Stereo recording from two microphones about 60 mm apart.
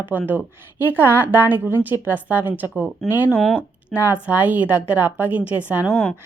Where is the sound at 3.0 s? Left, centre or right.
Centre.